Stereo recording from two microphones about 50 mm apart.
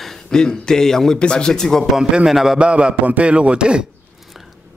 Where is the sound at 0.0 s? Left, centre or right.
Centre.